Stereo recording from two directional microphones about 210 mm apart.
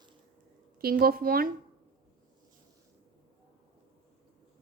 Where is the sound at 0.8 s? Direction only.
45° right (ahead or behind).